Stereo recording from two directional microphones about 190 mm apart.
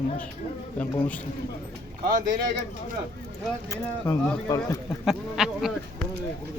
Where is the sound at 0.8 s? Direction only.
10° left (ahead or behind).